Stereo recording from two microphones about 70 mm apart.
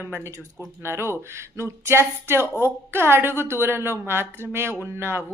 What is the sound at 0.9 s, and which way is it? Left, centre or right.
Speech, right.